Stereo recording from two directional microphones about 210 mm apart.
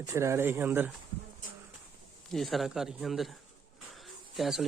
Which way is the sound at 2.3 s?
Centre (ahead or behind).